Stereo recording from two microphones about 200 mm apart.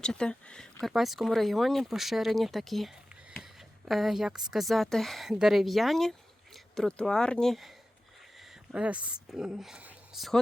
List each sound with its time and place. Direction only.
0.0 s speech: 5° left (ahead or behind)